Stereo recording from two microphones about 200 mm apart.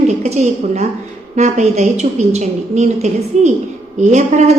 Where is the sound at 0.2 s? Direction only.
35° right (ahead or behind).